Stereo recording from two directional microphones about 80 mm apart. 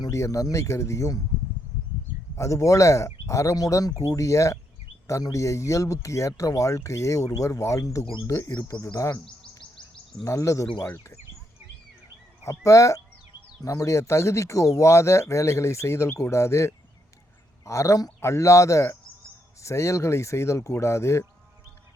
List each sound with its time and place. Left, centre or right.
0.1 s speech: left
2.3 s speech: left
10.2 s speech: left
12.5 s speech: left